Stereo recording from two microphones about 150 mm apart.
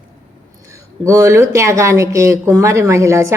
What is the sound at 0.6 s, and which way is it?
Speech, 20° right (ahead or behind).